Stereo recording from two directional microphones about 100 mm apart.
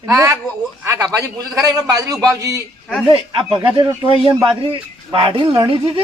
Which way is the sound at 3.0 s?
60° right (ahead or behind).